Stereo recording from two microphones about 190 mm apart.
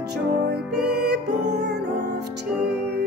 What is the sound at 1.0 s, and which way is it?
Music, 60° right (ahead or behind).